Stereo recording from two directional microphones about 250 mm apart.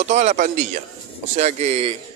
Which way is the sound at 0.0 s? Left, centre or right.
Right.